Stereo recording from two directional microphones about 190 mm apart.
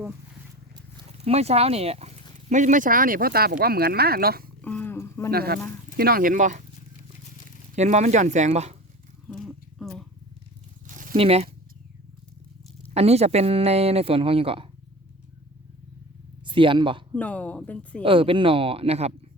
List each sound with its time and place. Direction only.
1.2 s speech: 35° right (ahead or behind); by 4.4 s 50° right (ahead or behind)
4.6 s dog: 10° left (ahead or behind)
5.3 s speech: 55° right (ahead or behind)
7.8 s speech: 40° right (ahead or behind)
9.3 s a sound: centre (ahead or behind)
10.8 s a sound: 45° right (ahead or behind)
11.2 s speech: 30° right (ahead or behind)
12.9 s speech: 35° right (ahead or behind)
16.5 s speech: 25° right (ahead or behind)
17.2 s speech: 10° left (ahead or behind)
18.0 s speech: 25° right (ahead or behind)